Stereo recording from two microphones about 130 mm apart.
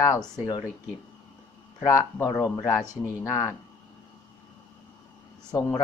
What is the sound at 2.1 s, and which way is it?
Speech, 25° left (ahead or behind).